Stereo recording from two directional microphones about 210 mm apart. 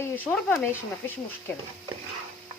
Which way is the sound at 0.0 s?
5° left (ahead or behind).